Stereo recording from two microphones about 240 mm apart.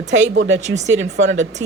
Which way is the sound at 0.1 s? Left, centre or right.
Right.